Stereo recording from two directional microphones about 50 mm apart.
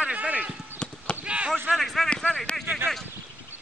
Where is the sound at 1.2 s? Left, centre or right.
Right.